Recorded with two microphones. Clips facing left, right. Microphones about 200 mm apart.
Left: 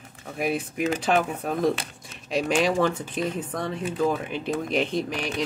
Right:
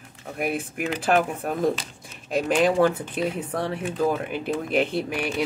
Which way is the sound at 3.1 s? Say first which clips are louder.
Right 2 dB; 10° right (ahead or behind).